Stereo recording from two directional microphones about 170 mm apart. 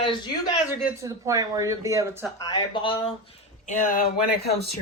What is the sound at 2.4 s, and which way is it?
Speech, 25° left (ahead or behind).